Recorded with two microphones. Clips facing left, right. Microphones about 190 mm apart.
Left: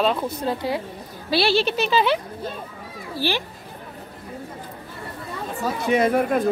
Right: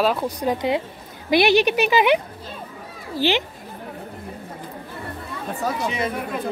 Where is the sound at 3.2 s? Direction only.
20° right (ahead or behind).